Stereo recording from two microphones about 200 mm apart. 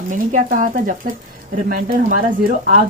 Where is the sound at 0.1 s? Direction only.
40° right (ahead or behind).